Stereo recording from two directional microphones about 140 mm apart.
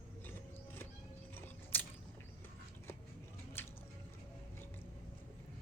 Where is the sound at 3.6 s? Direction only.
15° left (ahead or behind).